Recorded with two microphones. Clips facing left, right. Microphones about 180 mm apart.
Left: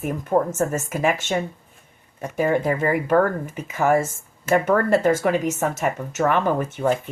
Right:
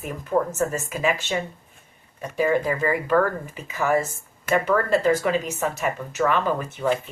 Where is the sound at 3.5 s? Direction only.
55° left (ahead or behind).